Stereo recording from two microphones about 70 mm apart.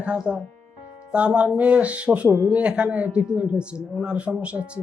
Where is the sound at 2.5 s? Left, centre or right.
Centre.